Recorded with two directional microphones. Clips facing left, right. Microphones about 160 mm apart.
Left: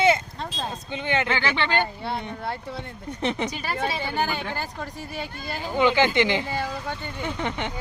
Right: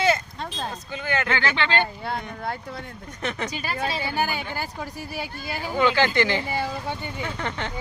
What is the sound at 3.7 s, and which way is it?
Speech, centre (ahead or behind).